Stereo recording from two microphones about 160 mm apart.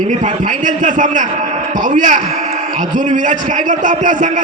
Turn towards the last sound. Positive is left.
turn(degrees=-55)  # may be behind; listen again after turning